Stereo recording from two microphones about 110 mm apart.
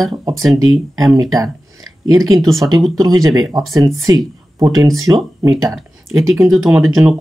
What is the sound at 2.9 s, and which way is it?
Speech, 35° right (ahead or behind).